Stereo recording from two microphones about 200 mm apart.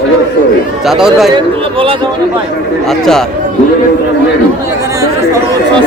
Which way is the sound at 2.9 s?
Centre (ahead or behind).